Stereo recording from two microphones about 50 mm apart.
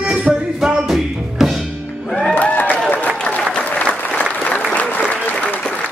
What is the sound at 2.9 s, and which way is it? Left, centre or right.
Applause, left.